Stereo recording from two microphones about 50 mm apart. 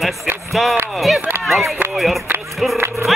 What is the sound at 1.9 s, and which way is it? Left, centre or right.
Music, centre.